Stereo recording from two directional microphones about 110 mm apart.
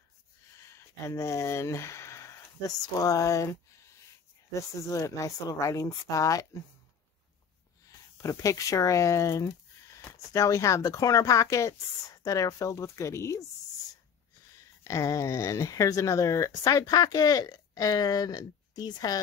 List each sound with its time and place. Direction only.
0.7 s speech: 25° left (ahead or behind)
8.2 s speech: 30° left (ahead or behind)
14.8 s speech: 30° left (ahead or behind)